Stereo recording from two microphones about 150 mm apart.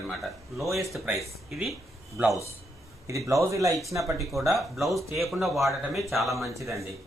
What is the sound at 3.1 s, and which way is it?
Speech, 20° right (ahead or behind).